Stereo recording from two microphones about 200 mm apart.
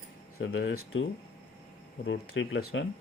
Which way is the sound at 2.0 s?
70° left (ahead or behind).